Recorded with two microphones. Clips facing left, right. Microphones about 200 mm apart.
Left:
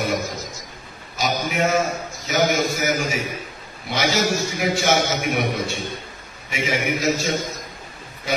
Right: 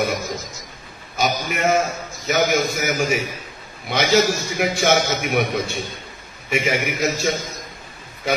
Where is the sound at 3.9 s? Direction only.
60° right (ahead or behind).